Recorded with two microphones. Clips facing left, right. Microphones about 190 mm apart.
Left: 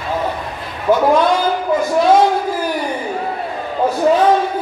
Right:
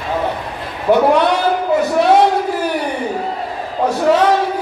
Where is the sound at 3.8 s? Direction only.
80° right.